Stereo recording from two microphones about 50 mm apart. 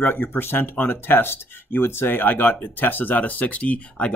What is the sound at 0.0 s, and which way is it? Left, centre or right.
Speech, left.